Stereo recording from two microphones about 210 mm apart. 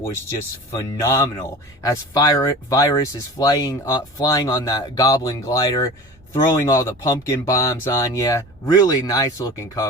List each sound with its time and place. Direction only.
0.7 s speech: 15° left (ahead or behind)